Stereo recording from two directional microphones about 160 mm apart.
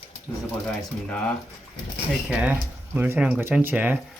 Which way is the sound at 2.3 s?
5° right (ahead or behind).